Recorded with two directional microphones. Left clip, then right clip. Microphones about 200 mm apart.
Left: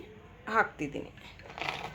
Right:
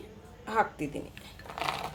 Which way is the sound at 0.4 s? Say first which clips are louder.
Even; 10° left (ahead or behind).